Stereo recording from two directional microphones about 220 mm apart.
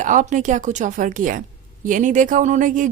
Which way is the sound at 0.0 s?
35° right (ahead or behind).